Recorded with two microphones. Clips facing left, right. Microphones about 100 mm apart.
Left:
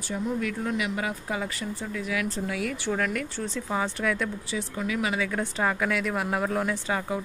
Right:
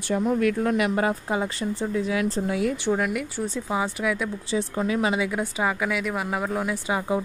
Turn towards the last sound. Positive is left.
turn(degrees=-15)  # may be behind; listen again after turning